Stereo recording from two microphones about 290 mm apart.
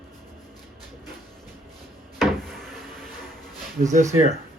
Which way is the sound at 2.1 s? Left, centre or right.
Centre.